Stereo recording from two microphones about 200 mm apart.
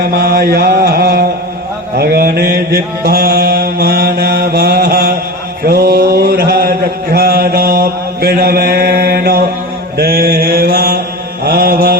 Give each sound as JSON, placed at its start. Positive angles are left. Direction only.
{"t": 0.0, "sound": "mantra", "side_deg": -50}